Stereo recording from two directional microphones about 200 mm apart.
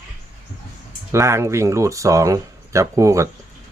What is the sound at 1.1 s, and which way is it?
Speech, 15° right (ahead or behind).